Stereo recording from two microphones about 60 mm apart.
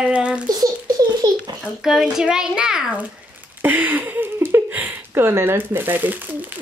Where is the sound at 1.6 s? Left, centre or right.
Centre.